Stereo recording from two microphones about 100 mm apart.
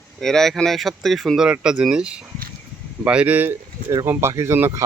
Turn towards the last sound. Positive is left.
turn(degrees=-25)  # may be behind; listen again after turning